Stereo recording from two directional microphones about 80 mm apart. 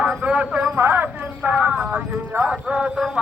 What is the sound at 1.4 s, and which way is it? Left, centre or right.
Clip-clop, centre.